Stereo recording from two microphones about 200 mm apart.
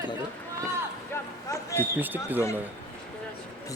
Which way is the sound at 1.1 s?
10° left (ahead or behind).